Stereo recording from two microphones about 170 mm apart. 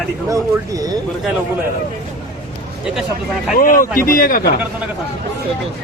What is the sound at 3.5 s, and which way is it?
Speech, 55° left (ahead or behind).